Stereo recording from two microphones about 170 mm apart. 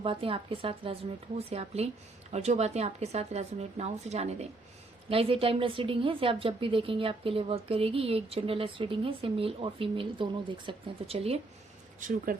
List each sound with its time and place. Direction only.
0.0 s a woman's voice: 30° right (ahead or behind)
11.9 s speech: 50° right (ahead or behind)